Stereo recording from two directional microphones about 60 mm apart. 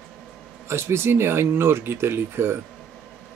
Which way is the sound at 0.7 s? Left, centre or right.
Right.